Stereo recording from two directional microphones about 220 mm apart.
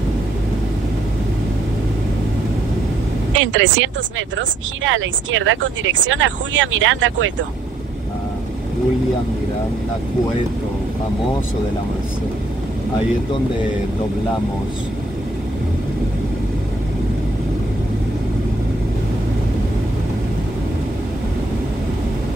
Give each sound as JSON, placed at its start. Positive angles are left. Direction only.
{"t": 3.3, "sound": "speech", "side_deg": -60}